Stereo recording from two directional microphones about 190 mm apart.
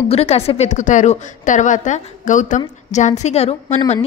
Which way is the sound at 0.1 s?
30° left (ahead or behind).